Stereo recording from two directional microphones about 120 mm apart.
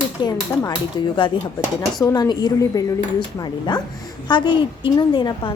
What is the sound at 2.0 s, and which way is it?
A woman's voice, 35° left (ahead or behind).